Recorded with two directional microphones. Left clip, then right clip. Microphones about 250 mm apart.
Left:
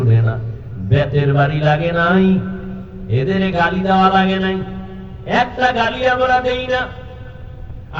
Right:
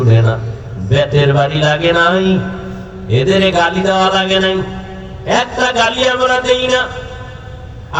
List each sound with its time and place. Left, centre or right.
0.1 s a man's voice: right